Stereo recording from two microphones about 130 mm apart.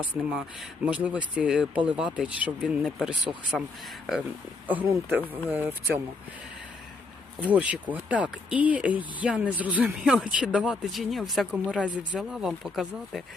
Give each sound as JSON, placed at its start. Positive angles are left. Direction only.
{"t": 0.0, "sound": "speech", "side_deg": -5}
{"t": 4.7, "sound": "speech", "side_deg": -15}
{"t": 7.3, "sound": "speech", "side_deg": -10}